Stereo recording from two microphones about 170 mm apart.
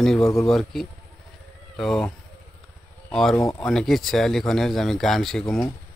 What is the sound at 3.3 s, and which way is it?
Speech, 15° left (ahead or behind).